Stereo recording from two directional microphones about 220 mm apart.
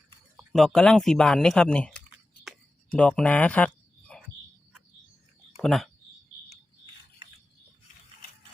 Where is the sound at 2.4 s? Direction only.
5° left (ahead or behind).